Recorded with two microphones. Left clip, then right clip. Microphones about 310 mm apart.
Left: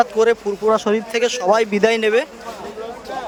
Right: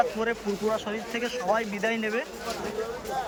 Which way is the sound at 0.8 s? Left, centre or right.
Centre.